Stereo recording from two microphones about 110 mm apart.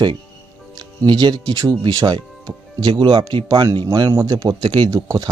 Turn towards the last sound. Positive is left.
turn(degrees=-35)  # may be behind; listen again after turning